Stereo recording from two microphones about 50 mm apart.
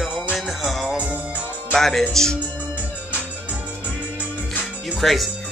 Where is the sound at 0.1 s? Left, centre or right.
Right.